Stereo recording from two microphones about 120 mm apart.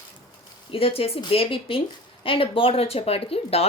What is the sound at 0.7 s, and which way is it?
Speech, 55° left (ahead or behind).